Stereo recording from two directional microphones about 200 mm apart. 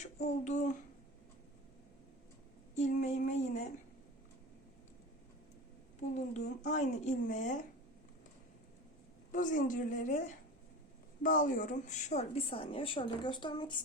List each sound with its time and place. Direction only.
0.4 s speech: 35° left (ahead or behind)
2.7 s speech: 35° left (ahead or behind)
6.1 s speech: 35° left (ahead or behind)
9.3 s a woman's voice: 40° left (ahead or behind); by 13.7 s 25° left (ahead or behind)